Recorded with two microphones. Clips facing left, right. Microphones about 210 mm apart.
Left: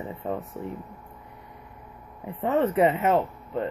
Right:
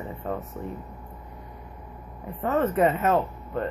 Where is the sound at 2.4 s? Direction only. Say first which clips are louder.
Left 1 dB; 15° left (ahead or behind).